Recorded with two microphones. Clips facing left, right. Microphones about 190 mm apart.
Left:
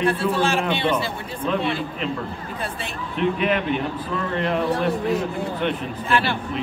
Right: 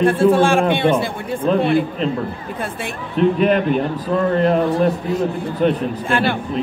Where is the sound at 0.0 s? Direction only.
50° right (ahead or behind).